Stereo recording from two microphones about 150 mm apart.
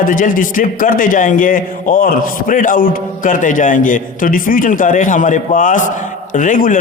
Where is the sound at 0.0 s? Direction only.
65° left (ahead or behind).